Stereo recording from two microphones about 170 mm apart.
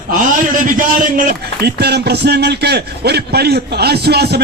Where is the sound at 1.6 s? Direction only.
75° right (ahead or behind).